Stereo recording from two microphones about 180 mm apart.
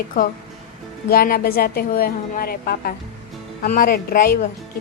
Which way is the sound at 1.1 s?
55° left (ahead or behind).